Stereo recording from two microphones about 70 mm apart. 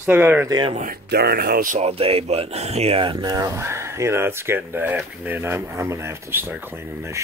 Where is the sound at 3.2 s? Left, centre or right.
Right.